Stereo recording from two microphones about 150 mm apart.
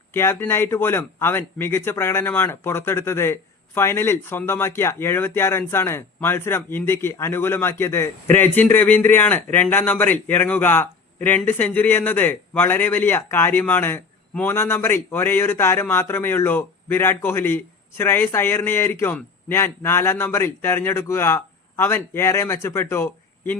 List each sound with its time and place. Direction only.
0.1 s speech: 15° left (ahead or behind)